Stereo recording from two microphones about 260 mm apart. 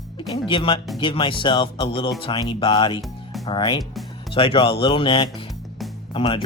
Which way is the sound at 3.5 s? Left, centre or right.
Centre.